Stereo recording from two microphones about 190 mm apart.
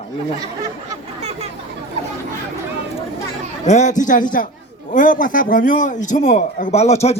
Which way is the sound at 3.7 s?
40° left (ahead or behind).